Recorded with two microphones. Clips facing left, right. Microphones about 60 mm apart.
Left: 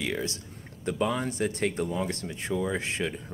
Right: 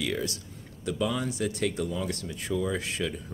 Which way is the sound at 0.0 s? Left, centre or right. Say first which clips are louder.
Even; left.